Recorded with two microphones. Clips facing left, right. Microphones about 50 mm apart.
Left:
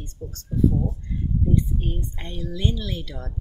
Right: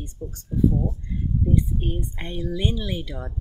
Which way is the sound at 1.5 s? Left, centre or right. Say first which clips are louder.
Right 1 dB; centre.